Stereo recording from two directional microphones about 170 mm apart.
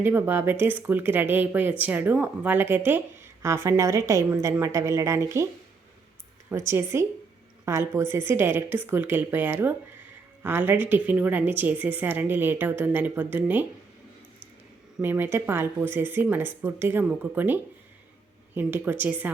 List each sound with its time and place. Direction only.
0.0 s a woman's voice: 10° right (ahead or behind)
6.5 s a woman's voice: 15° right (ahead or behind)
14.9 s a woman's voice: 10° right (ahead or behind)